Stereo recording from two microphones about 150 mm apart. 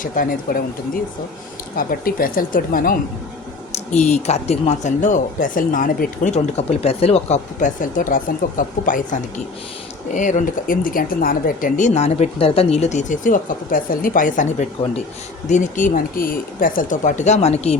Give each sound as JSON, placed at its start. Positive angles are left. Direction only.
{"t": 0.0, "sound": "speech", "side_deg": 70}
{"t": 1.7, "sound": "speech", "side_deg": 75}
{"t": 3.9, "sound": "speech", "side_deg": 50}
{"t": 6.3, "sound": "speech", "side_deg": 45}